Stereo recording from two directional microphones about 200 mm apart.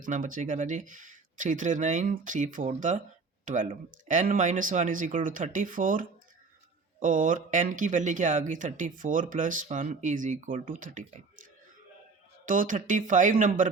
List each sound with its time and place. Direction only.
0.0 s speech: 40° right (ahead or behind)
12.5 s speech: 40° right (ahead or behind)